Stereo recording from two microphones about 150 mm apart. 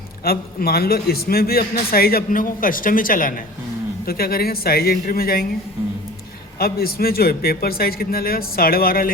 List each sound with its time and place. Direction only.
0.3 s a man's voice: 90° left; by 3.3 s 65° left (ahead or behind)
4.0 s a man's voice: 90° left
6.6 s a man's voice: 90° left